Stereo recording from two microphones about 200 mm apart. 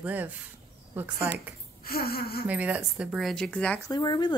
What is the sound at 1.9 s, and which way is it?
Speech, 50° left (ahead or behind).